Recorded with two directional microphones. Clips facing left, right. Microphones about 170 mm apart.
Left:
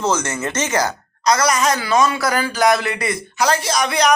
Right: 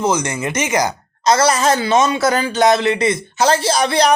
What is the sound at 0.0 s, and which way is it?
Speech, 15° right (ahead or behind).